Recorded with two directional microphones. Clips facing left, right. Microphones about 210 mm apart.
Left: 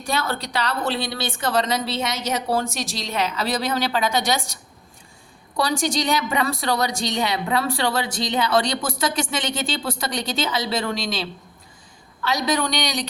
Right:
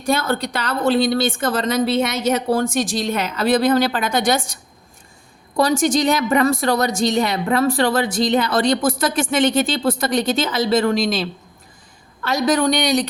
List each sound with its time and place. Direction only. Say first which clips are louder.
0.1 s a woman's voice: right 6 dB; 50° right (ahead or behind)
5.5 s a woman's voice: right 6 dB; 50° right (ahead or behind)